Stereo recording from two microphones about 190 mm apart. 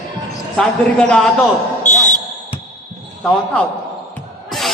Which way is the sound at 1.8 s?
40° left (ahead or behind).